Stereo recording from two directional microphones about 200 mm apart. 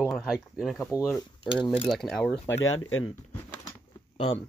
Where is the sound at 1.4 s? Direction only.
25° left (ahead or behind).